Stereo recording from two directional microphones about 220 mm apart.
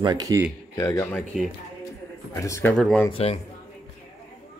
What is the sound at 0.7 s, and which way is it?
Speech, 15° left (ahead or behind).